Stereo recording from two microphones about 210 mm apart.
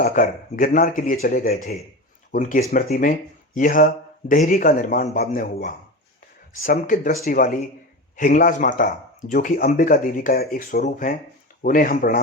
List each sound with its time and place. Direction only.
0.0 s speech: 40° left (ahead or behind)